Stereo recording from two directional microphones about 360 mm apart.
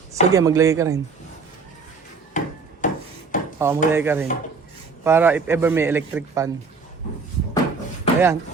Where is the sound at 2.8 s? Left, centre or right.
Left.